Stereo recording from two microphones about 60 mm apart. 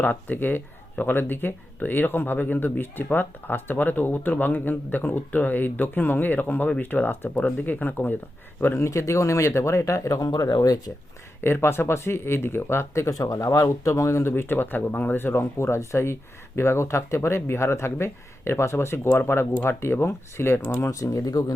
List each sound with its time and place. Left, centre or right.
0.0 s speech: left
8.8 s speech: left
11.3 s speech: left
20.8 s speech: left